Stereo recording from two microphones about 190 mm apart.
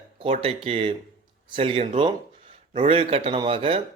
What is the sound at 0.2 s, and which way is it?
A man's voice, 30° right (ahead or behind).